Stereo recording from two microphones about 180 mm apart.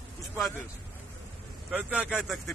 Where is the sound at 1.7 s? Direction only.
5° right (ahead or behind).